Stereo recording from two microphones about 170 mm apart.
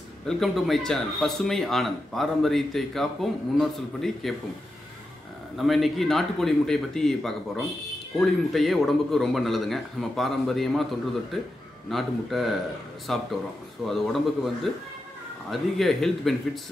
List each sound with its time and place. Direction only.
0.3 s speech: centre (ahead or behind)
5.6 s speech: centre (ahead or behind)